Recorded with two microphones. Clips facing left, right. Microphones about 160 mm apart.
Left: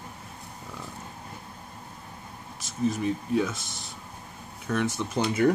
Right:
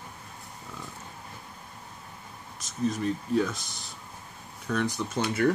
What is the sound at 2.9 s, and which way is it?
Speech, centre (ahead or behind).